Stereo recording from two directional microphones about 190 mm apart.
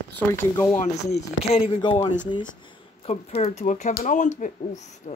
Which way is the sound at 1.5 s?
25° left (ahead or behind).